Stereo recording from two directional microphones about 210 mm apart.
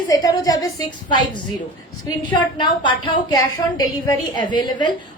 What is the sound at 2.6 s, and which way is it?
A woman's voice, 20° left (ahead or behind).